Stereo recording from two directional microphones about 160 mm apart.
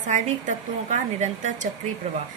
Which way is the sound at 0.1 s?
50° right (ahead or behind).